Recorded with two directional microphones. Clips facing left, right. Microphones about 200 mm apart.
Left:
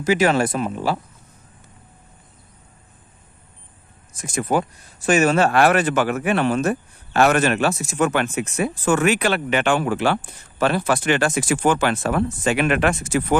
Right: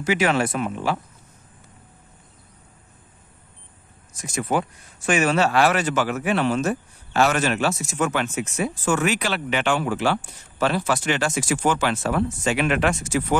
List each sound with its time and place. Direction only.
0.0 s speech: 40° left (ahead or behind)
4.1 s speech: 50° left (ahead or behind)